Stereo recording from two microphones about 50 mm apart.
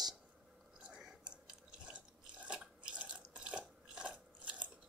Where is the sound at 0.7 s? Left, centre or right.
Right.